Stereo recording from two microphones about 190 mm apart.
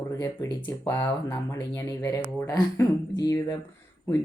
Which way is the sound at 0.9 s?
15° left (ahead or behind).